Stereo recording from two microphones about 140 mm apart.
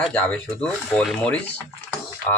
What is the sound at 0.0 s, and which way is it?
Speech, 10° left (ahead or behind).